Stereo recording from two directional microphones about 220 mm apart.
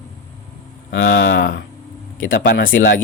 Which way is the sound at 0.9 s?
50° left (ahead or behind).